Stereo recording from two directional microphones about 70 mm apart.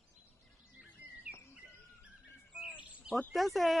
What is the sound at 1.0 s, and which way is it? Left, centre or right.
Bird, right.